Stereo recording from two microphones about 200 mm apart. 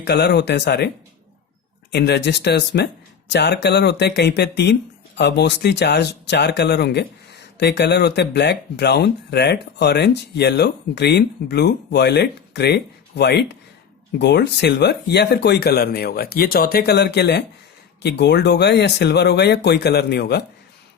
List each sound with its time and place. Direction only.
0.0 s speech: 55° left (ahead or behind)
1.9 s speech: 55° left (ahead or behind)